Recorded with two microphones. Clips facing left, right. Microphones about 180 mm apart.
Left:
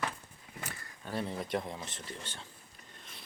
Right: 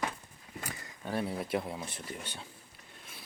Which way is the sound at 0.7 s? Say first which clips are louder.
Right 4 dB; 10° right (ahead or behind).